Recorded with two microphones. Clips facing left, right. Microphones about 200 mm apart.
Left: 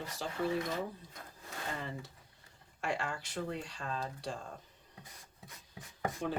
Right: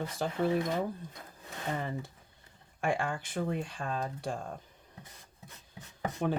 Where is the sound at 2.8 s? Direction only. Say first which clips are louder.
Right 5 dB; 55° right (ahead or behind).